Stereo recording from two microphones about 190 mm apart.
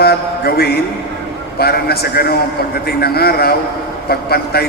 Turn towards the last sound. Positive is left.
turn(degrees=55)  # may be behind; listen again after turning